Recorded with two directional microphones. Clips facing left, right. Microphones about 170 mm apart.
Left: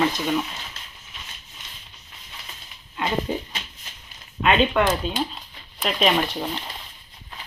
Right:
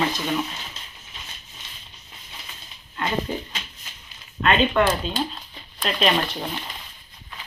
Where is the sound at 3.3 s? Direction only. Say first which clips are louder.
Left 2 dB; 15° left (ahead or behind).